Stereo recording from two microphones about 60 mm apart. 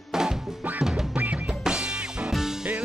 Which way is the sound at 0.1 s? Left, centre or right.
Centre.